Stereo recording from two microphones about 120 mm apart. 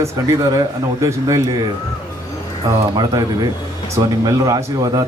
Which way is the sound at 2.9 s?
35° right (ahead or behind).